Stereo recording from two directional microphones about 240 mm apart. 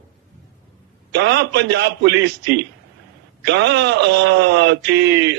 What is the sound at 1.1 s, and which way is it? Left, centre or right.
Speech, right.